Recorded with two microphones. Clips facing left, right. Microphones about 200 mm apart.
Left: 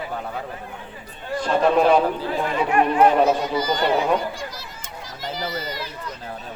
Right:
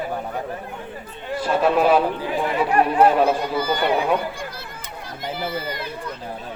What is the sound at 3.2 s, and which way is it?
Speech, 55° right (ahead or behind).